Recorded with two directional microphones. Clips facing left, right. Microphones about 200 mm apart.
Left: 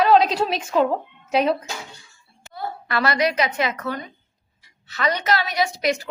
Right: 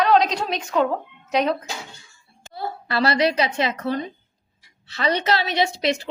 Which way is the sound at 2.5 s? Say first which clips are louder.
Right 1 dB; 30° right (ahead or behind).